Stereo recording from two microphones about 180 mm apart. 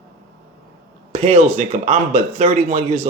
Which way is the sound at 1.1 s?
35° right (ahead or behind).